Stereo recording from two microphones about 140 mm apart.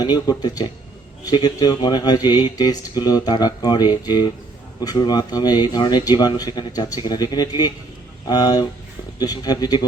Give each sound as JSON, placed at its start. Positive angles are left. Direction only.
{"t": 0.0, "sound": "speech", "side_deg": 30}